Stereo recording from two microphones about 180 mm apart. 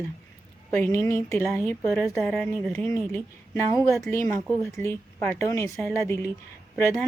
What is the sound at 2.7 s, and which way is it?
Speech, 15° left (ahead or behind).